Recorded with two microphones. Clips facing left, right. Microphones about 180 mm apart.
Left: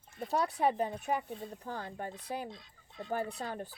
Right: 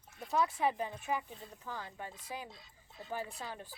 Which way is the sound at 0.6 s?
50° left (ahead or behind).